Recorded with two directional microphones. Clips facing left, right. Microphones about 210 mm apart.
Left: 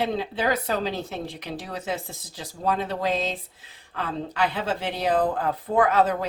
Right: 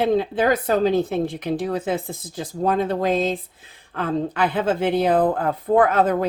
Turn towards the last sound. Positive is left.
turn(degrees=-50)  # may be behind; listen again after turning